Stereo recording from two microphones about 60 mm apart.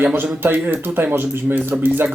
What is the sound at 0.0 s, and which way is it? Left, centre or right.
Speech, right.